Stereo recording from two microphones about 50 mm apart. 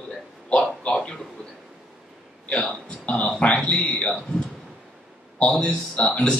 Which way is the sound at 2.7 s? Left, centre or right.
Left.